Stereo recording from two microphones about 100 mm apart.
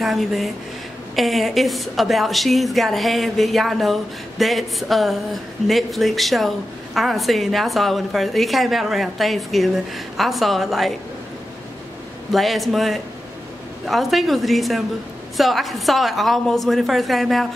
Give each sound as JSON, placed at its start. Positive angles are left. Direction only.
{"t": 0.0, "sound": "a woman's voice", "side_deg": 0}
{"t": 12.3, "sound": "a woman's voice", "side_deg": 0}